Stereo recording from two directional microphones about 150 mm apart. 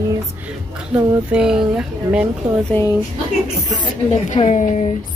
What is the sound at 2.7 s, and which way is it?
Speech, 15° left (ahead or behind).